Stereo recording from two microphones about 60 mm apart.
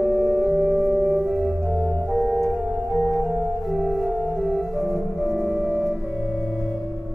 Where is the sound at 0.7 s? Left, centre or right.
Centre.